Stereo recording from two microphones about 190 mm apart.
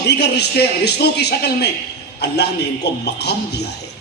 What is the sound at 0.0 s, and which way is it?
A man's voice, 60° left (ahead or behind).